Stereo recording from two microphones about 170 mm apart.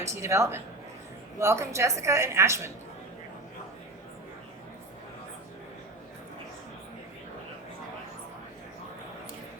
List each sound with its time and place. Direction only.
0.1 s a woman's voice: 15° right (ahead or behind)